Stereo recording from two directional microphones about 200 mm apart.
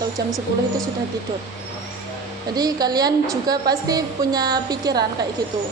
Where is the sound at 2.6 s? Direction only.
20° right (ahead or behind).